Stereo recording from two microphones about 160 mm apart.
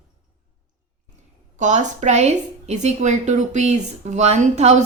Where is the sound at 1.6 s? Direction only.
45° right (ahead or behind).